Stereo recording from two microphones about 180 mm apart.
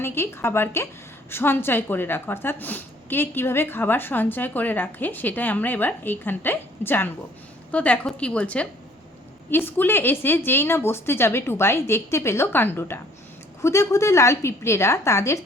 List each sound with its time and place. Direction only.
0.0 s a woman's voice: 15° left (ahead or behind)